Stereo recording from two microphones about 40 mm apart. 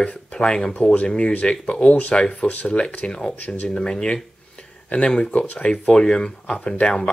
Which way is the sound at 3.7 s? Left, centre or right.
Left.